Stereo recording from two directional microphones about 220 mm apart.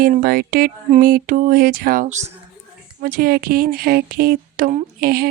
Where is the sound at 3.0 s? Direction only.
40° right (ahead or behind).